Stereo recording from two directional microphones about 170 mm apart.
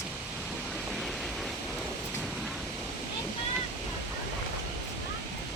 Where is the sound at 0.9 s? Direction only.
Centre (ahead or behind).